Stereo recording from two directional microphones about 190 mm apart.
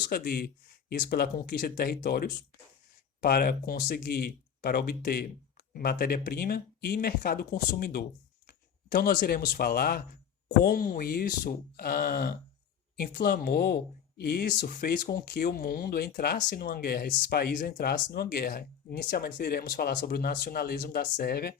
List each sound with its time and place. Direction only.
0.1 s speech: 55° left (ahead or behind)